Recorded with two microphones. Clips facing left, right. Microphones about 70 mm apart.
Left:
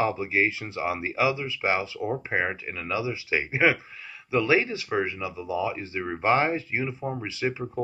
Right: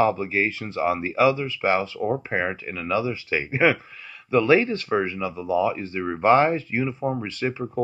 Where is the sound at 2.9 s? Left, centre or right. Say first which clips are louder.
Right 3 dB; centre.